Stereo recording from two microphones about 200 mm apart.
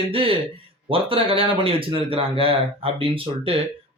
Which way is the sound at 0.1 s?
25° right (ahead or behind).